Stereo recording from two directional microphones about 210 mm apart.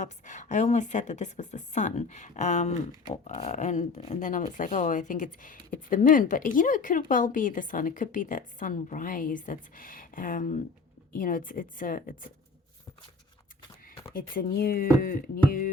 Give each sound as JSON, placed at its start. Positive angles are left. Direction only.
{"t": 0.0, "sound": "a woman's voice", "side_deg": 35}
{"t": 14.1, "sound": "a woman's voice", "side_deg": 40}